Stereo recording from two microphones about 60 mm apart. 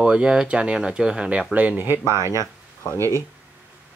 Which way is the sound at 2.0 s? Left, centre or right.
Right.